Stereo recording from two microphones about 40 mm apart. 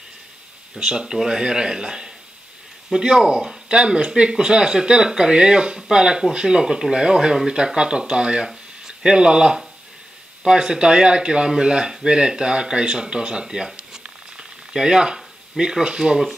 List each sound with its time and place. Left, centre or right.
0.7 s speech: centre
3.6 s speech: right
13.7 s a sound: centre